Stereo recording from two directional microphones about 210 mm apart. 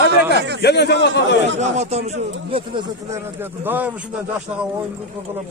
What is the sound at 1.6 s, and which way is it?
Speech, 30° right (ahead or behind).